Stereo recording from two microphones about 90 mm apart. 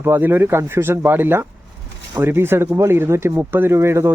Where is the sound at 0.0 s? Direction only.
25° right (ahead or behind).